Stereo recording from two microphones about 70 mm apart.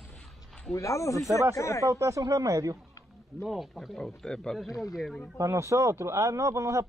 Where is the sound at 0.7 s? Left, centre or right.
Left.